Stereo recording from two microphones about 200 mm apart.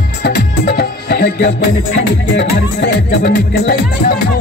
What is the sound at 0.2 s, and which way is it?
Music, 55° left (ahead or behind).